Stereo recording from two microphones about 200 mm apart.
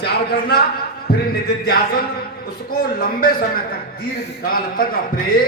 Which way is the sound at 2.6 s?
45° left (ahead or behind).